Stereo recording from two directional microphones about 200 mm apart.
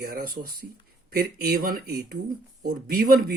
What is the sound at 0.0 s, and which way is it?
Speech, 45° right (ahead or behind).